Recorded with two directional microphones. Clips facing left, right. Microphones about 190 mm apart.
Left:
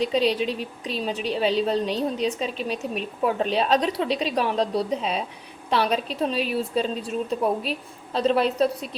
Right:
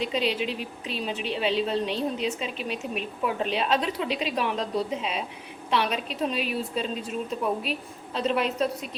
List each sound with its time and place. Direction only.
0.0 s a woman's voice: 35° left (ahead or behind)